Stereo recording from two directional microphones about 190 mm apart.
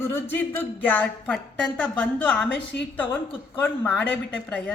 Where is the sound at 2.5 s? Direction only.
65° left (ahead or behind).